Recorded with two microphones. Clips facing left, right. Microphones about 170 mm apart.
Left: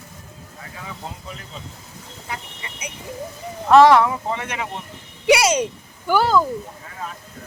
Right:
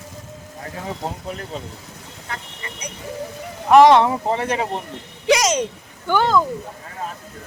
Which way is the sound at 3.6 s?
15° right (ahead or behind).